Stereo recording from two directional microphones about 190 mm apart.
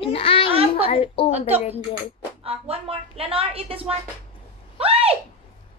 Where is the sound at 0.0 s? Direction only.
30° left (ahead or behind).